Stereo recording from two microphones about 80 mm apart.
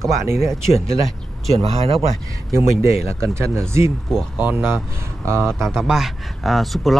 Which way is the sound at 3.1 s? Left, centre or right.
Right.